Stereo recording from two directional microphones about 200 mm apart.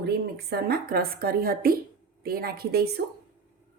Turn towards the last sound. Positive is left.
turn(degrees=-50)  # may be behind; listen again after turning